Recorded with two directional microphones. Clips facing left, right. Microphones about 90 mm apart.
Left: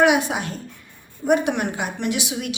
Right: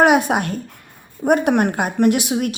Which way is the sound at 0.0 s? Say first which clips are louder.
Right 4 dB; 50° right (ahead or behind).